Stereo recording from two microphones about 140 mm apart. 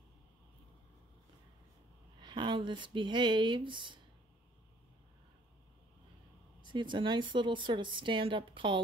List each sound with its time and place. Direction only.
2.2 s a woman's voice: 35° right (ahead or behind)
6.6 s a woman's voice: 35° right (ahead or behind)